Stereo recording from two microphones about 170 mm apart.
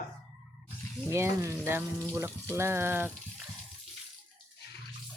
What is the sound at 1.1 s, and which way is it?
Speech, 15° right (ahead or behind).